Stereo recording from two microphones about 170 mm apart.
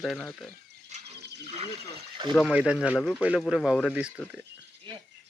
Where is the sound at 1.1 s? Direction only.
80° right.